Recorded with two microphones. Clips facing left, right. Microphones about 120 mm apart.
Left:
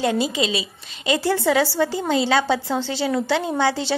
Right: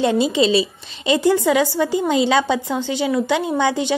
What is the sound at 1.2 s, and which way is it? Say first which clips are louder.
A woman's voice: right 3 dB; 15° right (ahead or behind).